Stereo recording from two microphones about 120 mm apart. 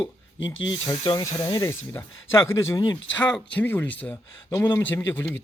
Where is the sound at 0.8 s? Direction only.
35° left (ahead or behind).